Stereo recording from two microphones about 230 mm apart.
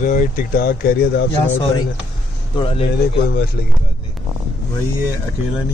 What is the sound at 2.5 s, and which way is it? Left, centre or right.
Speech, left.